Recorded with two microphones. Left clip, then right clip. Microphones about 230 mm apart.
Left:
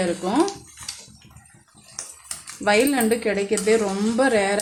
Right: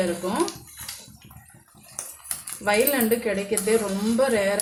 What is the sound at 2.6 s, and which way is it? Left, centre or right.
A woman's voice, left.